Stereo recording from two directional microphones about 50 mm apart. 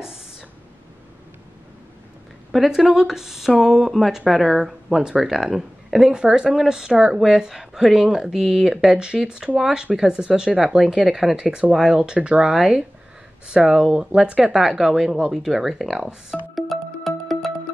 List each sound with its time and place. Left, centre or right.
2.5 s speech: centre
6.1 s speech: centre
11.3 s speech: centre
15.3 s speech: centre
16.5 s music: centre